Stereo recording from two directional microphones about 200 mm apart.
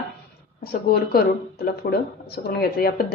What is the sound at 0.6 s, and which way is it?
Speech, 50° left (ahead or behind).